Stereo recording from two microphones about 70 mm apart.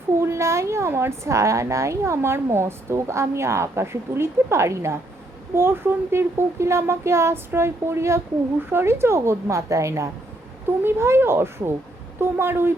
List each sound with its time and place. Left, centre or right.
0.2 s a woman's voice: right
10.8 s a woman's voice: right